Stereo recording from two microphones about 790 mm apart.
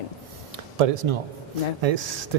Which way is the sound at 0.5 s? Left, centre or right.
Right.